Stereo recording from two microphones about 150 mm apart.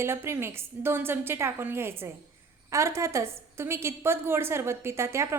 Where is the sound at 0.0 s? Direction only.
15° right (ahead or behind).